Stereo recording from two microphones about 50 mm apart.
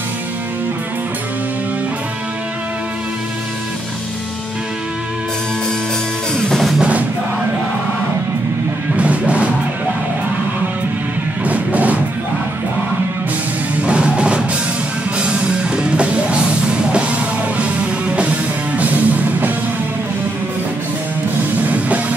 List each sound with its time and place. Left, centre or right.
6.3 s drum kit: centre
6.8 s music: right
8.9 s music: right
11.4 s music: right
13.7 s music: right
21.5 s music: right